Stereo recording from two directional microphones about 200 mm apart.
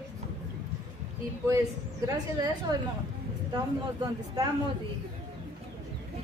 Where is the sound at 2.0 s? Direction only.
20° right (ahead or behind).